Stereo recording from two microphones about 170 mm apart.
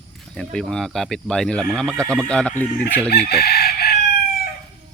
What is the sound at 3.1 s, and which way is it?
Chicken, 70° left (ahead or behind).